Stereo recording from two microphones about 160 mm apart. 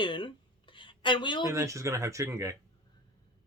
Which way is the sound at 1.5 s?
20° right (ahead or behind).